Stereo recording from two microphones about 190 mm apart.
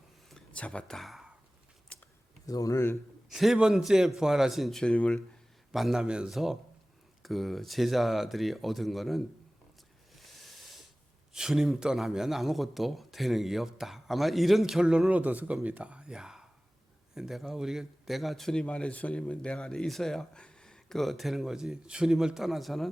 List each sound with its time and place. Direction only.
0.3 s a sound: 5° left (ahead or behind)
1.9 s computer keyboard: 5° left (ahead or behind)
2.5 s speech: 20° left (ahead or behind)
3.2 s a man's voice: centre (ahead or behind)
10.2 s a sound: centre (ahead or behind)
11.3 s a man's voice: 5° right (ahead or behind)